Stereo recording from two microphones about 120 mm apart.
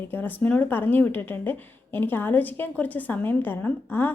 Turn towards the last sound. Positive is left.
turn(degrees=15)  # may be behind; listen again after turning